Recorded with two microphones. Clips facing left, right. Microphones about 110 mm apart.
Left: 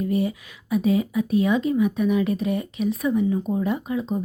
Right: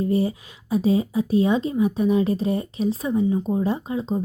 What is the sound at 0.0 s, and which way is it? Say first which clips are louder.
Speech: right 2 dB; 30° right (ahead or behind).